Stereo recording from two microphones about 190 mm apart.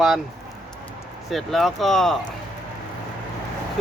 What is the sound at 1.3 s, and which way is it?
Speech, centre (ahead or behind).